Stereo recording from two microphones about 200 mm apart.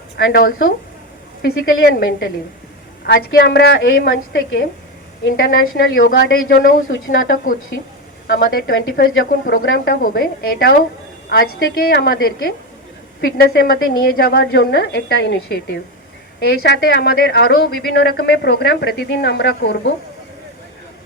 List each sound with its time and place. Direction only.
0.2 s a woman's voice: 65° left (ahead or behind)
1.4 s a woman's voice: 50° left (ahead or behind)
5.2 s a woman's voice: 50° left (ahead or behind)